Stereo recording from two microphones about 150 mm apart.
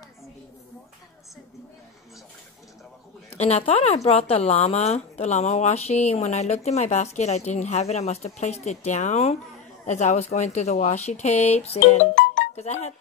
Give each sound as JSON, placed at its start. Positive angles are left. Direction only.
{"t": 3.3, "sound": "a woman's voice", "side_deg": 45}